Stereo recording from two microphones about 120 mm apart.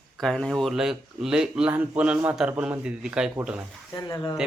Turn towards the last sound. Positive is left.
turn(degrees=35)  # may be behind; listen again after turning